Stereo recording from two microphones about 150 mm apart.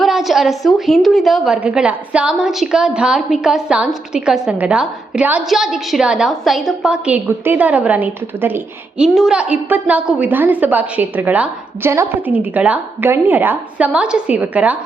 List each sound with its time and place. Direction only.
0.0 s a woman's voice: centre (ahead or behind)